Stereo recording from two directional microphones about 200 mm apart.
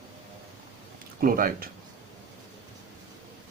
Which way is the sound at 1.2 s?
45° right (ahead or behind).